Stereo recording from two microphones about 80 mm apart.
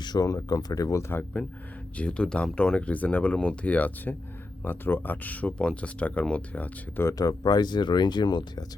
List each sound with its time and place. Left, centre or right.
0.0 s a sound: left
0.3 s speech: left
2.0 s speech: centre
7.2 s speech: left